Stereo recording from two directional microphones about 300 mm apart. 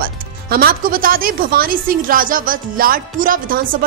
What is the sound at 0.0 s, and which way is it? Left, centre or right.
Speech, right.